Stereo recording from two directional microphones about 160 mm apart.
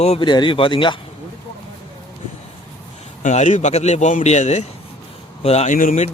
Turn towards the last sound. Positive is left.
turn(degrees=55)  # may be behind; listen again after turning